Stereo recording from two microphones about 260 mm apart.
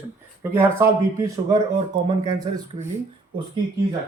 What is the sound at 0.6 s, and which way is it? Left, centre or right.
Speech, centre.